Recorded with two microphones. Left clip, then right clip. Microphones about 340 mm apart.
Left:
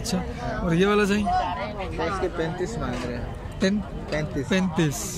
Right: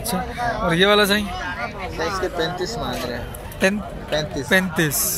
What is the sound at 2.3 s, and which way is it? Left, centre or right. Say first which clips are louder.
Speech: right 4 dB; centre.